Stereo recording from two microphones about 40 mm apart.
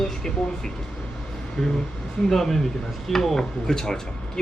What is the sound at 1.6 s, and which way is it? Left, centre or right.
Speech, centre.